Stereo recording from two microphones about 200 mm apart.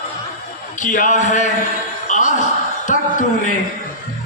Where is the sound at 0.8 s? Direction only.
40° left (ahead or behind).